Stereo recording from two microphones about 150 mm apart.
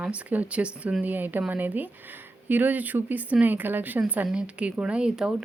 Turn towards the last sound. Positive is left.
turn(degrees=-5)  # may be behind; listen again after turning